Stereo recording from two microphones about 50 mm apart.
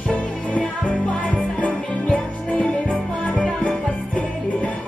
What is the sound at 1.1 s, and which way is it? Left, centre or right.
Music, left.